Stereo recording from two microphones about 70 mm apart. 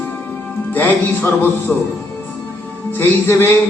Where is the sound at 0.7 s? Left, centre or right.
Left.